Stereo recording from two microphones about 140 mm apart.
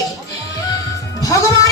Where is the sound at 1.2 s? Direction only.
25° left (ahead or behind).